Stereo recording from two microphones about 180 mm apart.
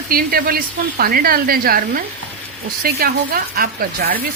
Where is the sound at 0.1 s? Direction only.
55° right (ahead or behind).